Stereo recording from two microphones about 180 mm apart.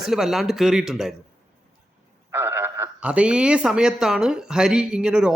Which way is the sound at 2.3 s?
15° right (ahead or behind).